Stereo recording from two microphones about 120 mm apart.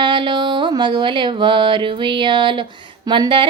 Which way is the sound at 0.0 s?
40° right (ahead or behind).